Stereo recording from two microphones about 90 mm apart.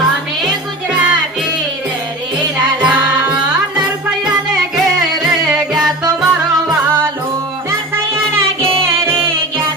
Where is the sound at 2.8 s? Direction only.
15° right (ahead or behind).